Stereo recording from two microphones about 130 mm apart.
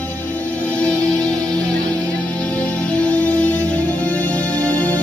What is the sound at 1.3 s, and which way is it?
Music, 30° right (ahead or behind).